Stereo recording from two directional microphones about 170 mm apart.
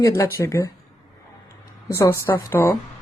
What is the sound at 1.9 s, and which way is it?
Speech, 15° left (ahead or behind).